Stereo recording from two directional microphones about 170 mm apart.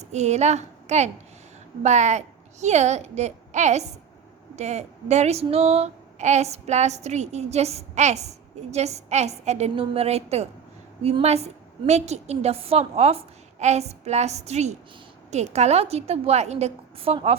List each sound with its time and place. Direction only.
0.0 s a woman's voice: 40° right (ahead or behind)